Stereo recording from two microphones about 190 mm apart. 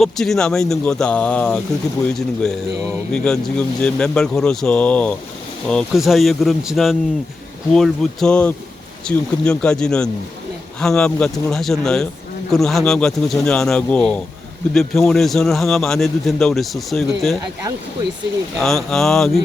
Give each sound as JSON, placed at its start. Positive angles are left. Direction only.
{"t": 0.0, "sound": "a man's voice", "side_deg": 0}
{"t": 18.6, "sound": "a man's voice", "side_deg": 0}